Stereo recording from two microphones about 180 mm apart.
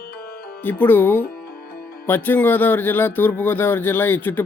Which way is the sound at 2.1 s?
10° left (ahead or behind).